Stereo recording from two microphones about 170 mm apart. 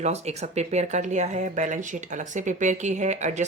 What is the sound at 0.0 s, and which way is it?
Speech, 40° right (ahead or behind).